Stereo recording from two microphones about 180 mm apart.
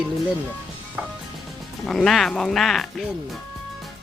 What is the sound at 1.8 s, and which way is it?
Speech, centre (ahead or behind).